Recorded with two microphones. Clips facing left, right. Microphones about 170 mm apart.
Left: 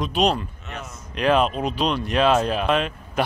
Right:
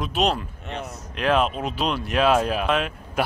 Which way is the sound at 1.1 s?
Centre (ahead or behind).